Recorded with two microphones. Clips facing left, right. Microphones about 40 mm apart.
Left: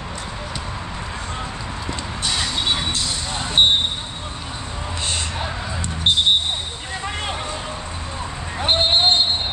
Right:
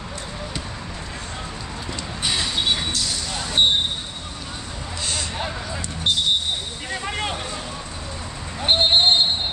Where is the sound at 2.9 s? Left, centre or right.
Left.